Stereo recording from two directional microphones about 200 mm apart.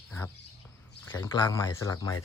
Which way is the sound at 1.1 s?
10° left (ahead or behind).